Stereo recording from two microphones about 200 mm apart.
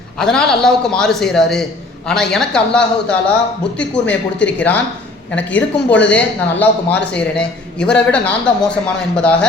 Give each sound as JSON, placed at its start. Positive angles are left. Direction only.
{"t": 0.2, "sound": "speech", "side_deg": 5}